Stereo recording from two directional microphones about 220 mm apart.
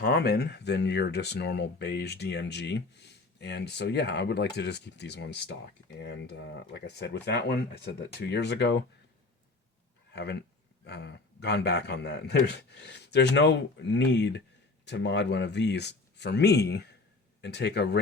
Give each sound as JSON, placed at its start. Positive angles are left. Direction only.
{"t": 0.0, "sound": "speech", "side_deg": 45}
{"t": 10.1, "sound": "speech", "side_deg": 50}